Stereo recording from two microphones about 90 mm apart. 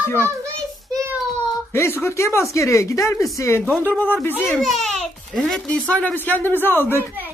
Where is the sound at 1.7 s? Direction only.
30° left (ahead or behind).